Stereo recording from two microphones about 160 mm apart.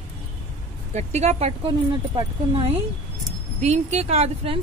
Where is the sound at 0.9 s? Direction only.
45° right (ahead or behind).